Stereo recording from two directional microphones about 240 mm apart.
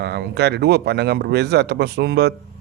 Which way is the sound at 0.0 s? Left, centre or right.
Right.